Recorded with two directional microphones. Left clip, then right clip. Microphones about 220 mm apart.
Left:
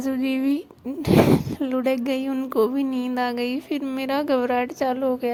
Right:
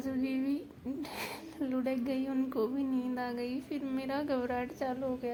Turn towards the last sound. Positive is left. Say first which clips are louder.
# left 12 dB
turn(degrees=35)  # may be behind; listen again after turning